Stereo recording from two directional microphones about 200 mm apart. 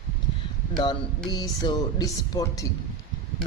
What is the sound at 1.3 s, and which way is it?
Speech, 20° left (ahead or behind).